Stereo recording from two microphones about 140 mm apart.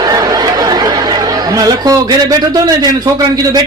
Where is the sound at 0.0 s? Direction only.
30° right (ahead or behind).